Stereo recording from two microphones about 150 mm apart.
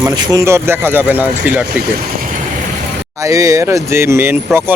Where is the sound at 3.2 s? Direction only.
20° right (ahead or behind).